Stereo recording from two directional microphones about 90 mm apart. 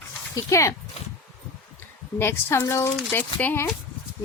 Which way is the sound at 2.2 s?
25° left (ahead or behind).